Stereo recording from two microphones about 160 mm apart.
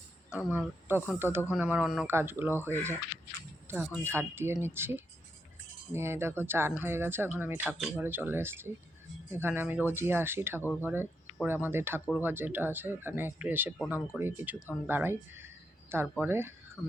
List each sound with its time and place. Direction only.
0.3 s speech: 5° right (ahead or behind)
10.6 s speech: 15° left (ahead or behind)
10.8 s speech: 15° right (ahead or behind)